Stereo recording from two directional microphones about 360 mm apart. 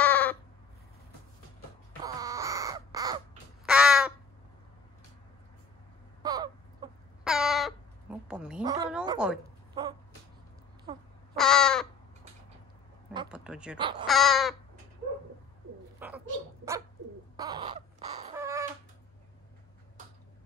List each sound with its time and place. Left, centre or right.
0.0 s a sound: centre
2.0 s crow: centre
6.2 s a sound: centre
11.3 s crow: centre
13.1 s a sound: centre
13.7 s speech: centre
14.0 s crow: centre
16.0 s bird: centre
17.4 s crow: centre